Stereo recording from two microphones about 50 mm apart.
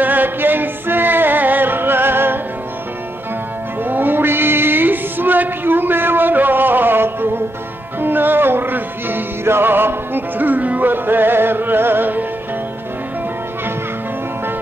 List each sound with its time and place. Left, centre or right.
0.0 s music: right
3.8 s music: right